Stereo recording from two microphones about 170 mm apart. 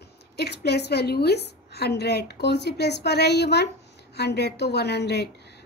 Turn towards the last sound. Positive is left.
turn(degrees=75)  # may be behind; listen again after turning